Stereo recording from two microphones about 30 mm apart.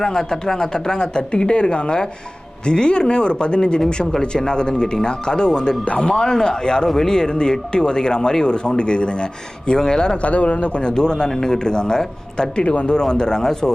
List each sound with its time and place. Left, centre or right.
0.0 s a man's voice: centre
10.2 s a man's voice: left
11.3 s speech: centre
12.6 s speech: left
12.9 s speech: left